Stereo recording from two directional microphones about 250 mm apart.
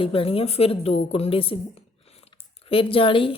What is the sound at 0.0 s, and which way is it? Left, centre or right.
A woman's voice, left.